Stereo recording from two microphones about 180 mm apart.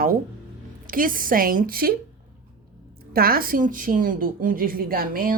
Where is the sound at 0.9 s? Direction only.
50° right (ahead or behind).